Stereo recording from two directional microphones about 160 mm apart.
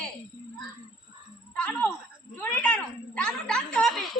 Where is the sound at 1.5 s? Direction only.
10° left (ahead or behind).